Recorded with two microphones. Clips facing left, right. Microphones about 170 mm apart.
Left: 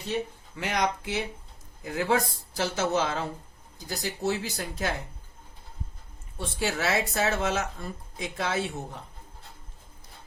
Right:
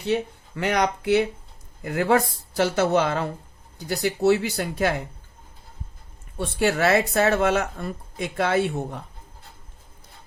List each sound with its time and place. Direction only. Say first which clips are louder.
0.0 s speech: right 6 dB; 65° right (ahead or behind)
6.3 s speech: right 7 dB; 60° right (ahead or behind)